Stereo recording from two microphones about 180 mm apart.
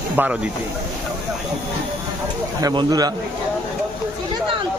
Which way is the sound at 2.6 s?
25° right (ahead or behind).